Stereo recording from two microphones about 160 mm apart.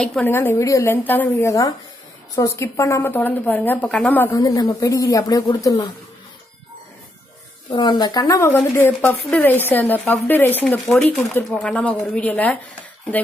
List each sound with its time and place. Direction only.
0.0 s a woman's voice: centre (ahead or behind)
0.3 s speech: 15° left (ahead or behind)
4.3 s speech: 25° left (ahead or behind)
7.7 s speech: 25° left (ahead or behind); by 12.5 s 10° left (ahead or behind)